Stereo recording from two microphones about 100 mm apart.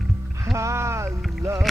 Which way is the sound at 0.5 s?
30° right (ahead or behind).